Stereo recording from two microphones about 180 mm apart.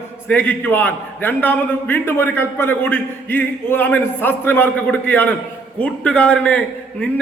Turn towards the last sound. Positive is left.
turn(degrees=10)  # may be behind; listen again after turning